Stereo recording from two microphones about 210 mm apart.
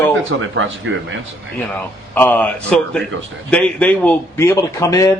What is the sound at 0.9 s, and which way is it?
Speech, 60° right (ahead or behind).